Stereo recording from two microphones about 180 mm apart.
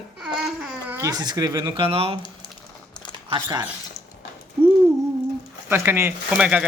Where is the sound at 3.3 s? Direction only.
25° right (ahead or behind).